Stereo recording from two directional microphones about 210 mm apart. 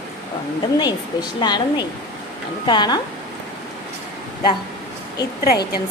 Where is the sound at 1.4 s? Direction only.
20° left (ahead or behind).